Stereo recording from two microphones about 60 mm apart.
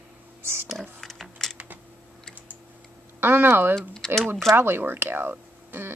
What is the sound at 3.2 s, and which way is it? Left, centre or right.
Speech, right.